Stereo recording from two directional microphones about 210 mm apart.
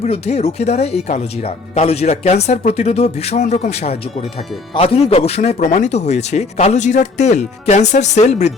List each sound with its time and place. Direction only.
0.0 s speech: 30° left (ahead or behind)